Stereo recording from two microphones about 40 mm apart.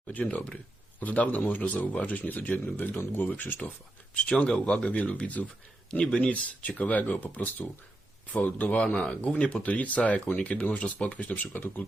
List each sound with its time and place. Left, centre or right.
0.1 s speech: left
4.4 s speech: left